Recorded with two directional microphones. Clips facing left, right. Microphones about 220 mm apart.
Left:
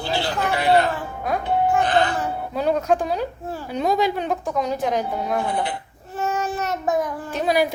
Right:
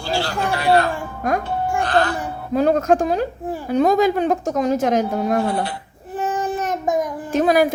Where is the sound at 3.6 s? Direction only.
50° right (ahead or behind).